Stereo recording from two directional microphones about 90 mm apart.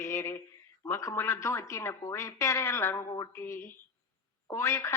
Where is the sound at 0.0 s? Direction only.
30° left (ahead or behind).